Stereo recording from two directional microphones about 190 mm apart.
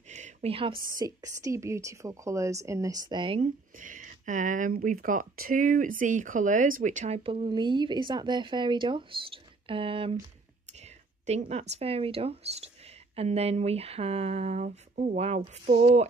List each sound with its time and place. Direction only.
0.1 s a sound: 35° right (ahead or behind)
0.9 s a woman's voice: 20° right (ahead or behind)
3.7 s speech: 45° right (ahead or behind); by 15.9 s 25° right (ahead or behind)